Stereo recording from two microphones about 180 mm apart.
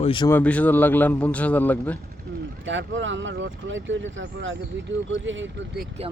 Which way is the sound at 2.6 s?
90° right.